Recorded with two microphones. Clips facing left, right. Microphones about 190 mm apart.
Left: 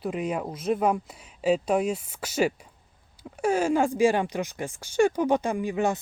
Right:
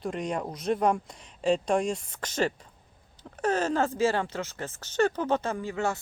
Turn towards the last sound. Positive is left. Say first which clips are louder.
# left 4 dB
turn(degrees=15)  # may be behind; listen again after turning